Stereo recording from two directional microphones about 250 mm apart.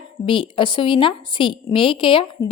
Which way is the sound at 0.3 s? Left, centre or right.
Centre.